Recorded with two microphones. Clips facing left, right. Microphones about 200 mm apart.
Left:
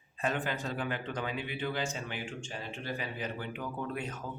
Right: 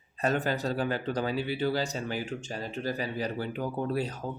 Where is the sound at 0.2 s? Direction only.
40° right (ahead or behind).